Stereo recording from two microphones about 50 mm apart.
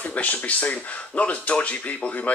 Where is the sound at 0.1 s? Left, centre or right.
Left.